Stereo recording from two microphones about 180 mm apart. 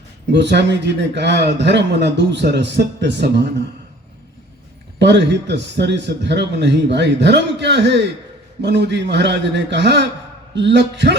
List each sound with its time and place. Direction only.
0.3 s a man's voice: 70° right (ahead or behind)
4.9 s a man's voice: 75° right (ahead or behind)